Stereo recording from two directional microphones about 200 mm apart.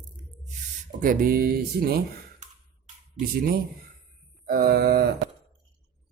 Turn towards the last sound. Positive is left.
turn(degrees=-50)  # may be behind; listen again after turning